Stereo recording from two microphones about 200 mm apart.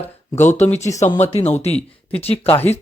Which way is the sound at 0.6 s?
35° left (ahead or behind).